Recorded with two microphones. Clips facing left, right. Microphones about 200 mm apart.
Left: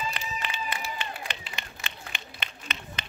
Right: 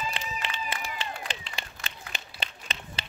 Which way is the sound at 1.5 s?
35° right (ahead or behind).